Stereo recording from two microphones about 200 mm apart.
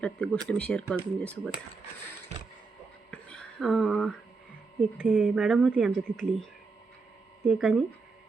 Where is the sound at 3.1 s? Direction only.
5° left (ahead or behind).